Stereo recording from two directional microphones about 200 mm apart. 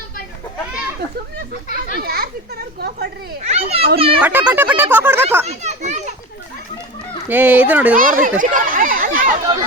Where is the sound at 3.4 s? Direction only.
30° right (ahead or behind).